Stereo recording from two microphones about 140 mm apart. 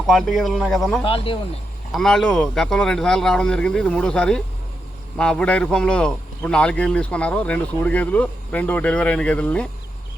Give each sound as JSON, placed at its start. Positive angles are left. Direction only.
{"t": 0.1, "sound": "speech", "side_deg": 0}
{"t": 1.0, "sound": "speech", "side_deg": 40}
{"t": 1.9, "sound": "a man's voice", "side_deg": 0}